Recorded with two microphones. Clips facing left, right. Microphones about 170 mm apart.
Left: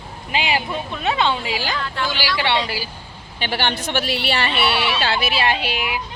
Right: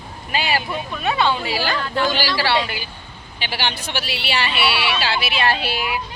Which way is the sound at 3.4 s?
50° left (ahead or behind).